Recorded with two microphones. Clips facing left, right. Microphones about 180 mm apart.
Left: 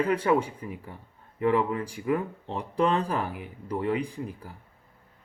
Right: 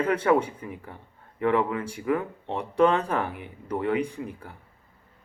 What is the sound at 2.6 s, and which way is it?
Speech, 35° left (ahead or behind).